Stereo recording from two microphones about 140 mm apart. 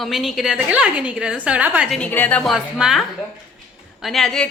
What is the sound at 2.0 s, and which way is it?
A woman's voice, 10° left (ahead or behind).